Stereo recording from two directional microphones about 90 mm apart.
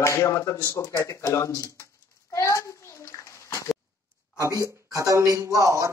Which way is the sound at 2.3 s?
35° left (ahead or behind).